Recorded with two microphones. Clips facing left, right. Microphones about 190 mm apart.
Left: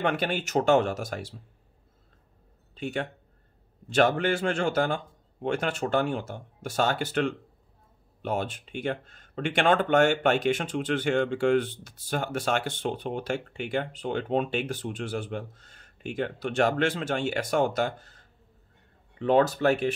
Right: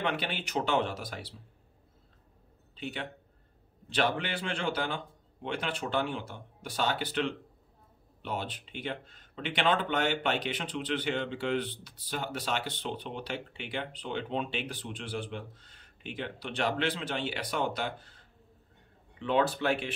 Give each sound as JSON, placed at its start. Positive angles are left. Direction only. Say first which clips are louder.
{"t": 0.0, "sound": "speech", "louder": "left 6 dB", "side_deg": 45}
{"t": 2.7, "sound": "speech", "louder": "left 7 dB", "side_deg": 50}